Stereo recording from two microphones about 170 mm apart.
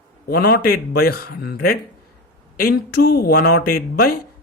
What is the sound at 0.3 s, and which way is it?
Speech, 65° left (ahead or behind).